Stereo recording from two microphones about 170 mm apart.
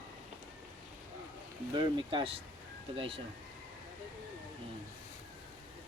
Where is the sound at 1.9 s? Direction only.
30° right (ahead or behind).